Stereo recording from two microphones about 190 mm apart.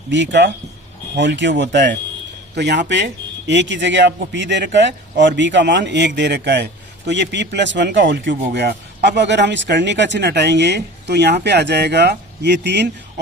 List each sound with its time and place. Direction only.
0.1 s speech: 70° right (ahead or behind)